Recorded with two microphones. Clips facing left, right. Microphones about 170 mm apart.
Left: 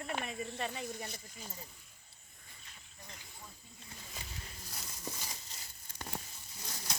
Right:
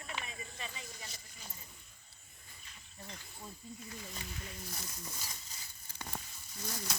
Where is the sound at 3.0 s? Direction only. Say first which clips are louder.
Right 5 dB; 15° left (ahead or behind).